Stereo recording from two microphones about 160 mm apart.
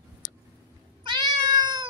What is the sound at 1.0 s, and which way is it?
Cat, 30° right (ahead or behind).